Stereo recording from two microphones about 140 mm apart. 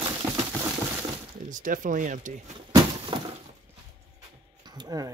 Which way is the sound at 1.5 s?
70° right (ahead or behind).